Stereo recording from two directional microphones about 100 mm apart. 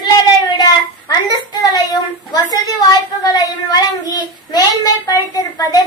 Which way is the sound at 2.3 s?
40° left (ahead or behind).